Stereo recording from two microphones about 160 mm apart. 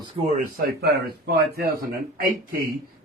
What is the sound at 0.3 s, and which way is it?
Speech, 65° right (ahead or behind).